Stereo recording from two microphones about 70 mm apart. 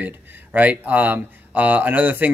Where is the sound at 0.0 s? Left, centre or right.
Right.